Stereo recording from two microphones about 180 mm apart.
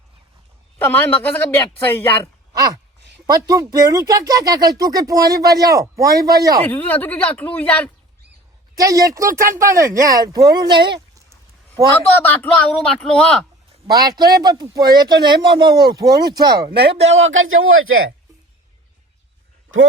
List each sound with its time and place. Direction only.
0.8 s speech: 10° left (ahead or behind)
2.5 s a sound: 20° right (ahead or behind)
3.2 s speech: 20° right (ahead or behind)
6.7 s speech: 10° left (ahead or behind)
8.7 s speech: 20° right (ahead or behind)
12.2 s a man's voice: 10° left (ahead or behind)
14.2 s speech: 20° right (ahead or behind)
16.6 s speech: 65° right (ahead or behind)
16.9 s speech: 35° right (ahead or behind)
17.2 s speech: 90° right